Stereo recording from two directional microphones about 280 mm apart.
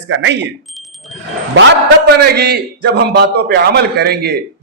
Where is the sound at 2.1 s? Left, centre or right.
Right.